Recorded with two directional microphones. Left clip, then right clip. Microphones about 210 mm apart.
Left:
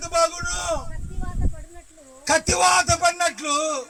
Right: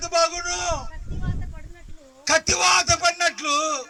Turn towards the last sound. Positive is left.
turn(degrees=55)  # may be behind; listen again after turning